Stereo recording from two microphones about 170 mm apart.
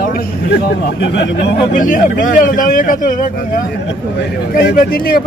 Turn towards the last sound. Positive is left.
turn(degrees=60)  # may be behind; listen again after turning